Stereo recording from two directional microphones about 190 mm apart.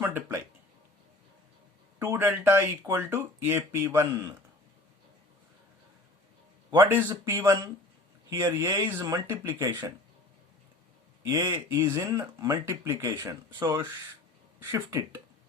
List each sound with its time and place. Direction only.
0.0 s a sound: 10° right (ahead or behind)
2.0 s speech: 15° right (ahead or behind)
6.7 s speech: 10° right (ahead or behind)
11.3 s speech: 15° right (ahead or behind)